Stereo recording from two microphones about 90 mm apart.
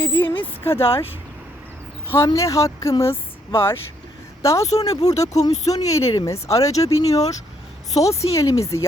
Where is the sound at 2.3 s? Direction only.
35° left (ahead or behind).